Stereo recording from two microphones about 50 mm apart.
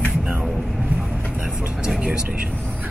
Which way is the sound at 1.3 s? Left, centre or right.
Centre.